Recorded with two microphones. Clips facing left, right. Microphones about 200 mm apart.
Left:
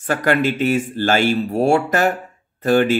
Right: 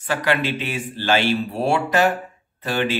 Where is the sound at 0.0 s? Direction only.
45° left (ahead or behind).